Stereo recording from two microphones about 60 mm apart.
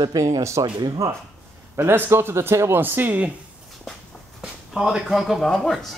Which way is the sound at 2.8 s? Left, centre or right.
Right.